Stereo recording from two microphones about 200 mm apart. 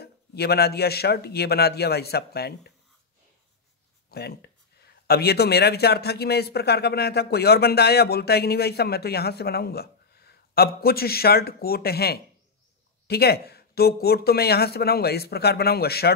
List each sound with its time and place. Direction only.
0.0 s speech: 55° left (ahead or behind)
4.1 s speech: 55° left (ahead or behind)